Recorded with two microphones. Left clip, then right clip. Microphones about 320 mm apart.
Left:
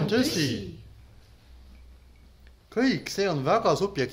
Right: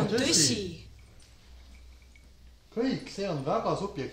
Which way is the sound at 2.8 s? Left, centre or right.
Left.